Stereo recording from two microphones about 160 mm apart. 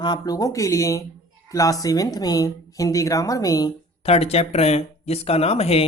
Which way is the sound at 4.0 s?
40° left (ahead or behind).